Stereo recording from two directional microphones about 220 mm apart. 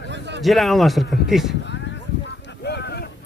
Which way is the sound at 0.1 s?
50° right (ahead or behind).